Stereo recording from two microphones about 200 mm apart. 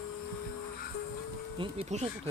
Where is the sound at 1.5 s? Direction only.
35° right (ahead or behind).